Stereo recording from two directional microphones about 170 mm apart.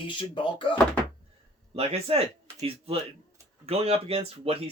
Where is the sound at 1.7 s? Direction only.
35° right (ahead or behind).